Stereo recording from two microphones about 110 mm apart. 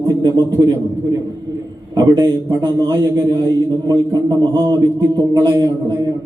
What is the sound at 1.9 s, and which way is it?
A man's voice, 35° right (ahead or behind).